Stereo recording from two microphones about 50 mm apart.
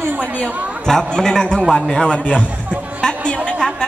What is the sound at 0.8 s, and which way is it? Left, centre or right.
A man's voice, centre.